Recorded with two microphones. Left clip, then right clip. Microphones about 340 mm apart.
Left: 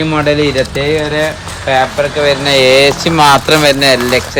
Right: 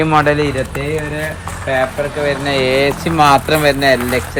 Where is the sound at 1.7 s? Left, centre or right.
Centre.